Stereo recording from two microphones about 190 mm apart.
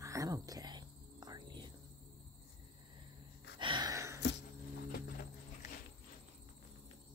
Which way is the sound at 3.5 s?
25° right (ahead or behind).